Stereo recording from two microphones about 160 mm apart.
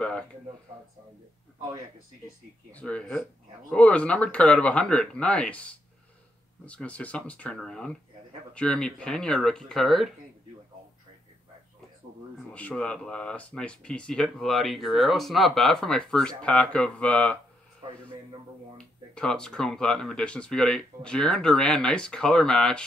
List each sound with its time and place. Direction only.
2.7 s speech: 5° left (ahead or behind)
12.4 s speech: 5° left (ahead or behind)
17.8 s a man's voice: 30° right (ahead or behind)
19.1 s speech: 5° left (ahead or behind)